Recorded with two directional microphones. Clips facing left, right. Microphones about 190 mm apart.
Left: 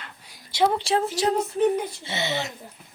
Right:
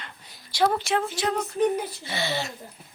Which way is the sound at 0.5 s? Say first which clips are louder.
Left 2 dB; 25° left (ahead or behind).